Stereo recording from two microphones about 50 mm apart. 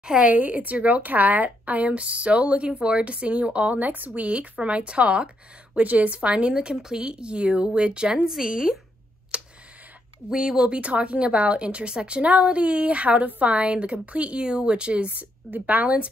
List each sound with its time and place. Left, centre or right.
0.0 s speech: centre
0.3 s speech: right; by 8.7 s centre
9.3 s a sound: right
10.3 s speech: centre
10.7 s speech: right
15.5 s speech: right